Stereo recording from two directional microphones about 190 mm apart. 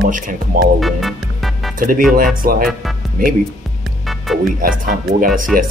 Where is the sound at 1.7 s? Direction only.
45° right (ahead or behind).